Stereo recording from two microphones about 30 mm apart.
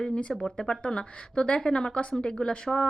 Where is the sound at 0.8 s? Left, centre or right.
Left.